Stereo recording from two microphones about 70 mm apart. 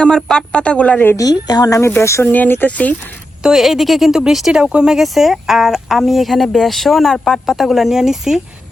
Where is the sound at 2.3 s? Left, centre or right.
Left.